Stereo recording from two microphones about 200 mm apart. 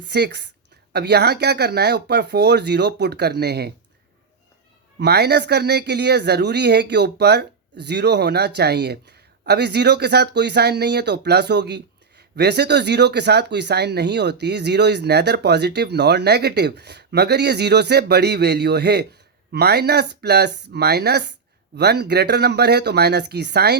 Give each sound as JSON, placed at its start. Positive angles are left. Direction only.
{"t": 0.1, "sound": "speech", "side_deg": -55}
{"t": 4.9, "sound": "speech", "side_deg": -55}